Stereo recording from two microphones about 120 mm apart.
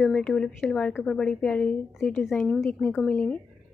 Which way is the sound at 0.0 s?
5° left (ahead or behind).